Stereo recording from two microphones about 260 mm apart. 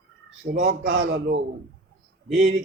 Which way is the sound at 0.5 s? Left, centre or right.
Right.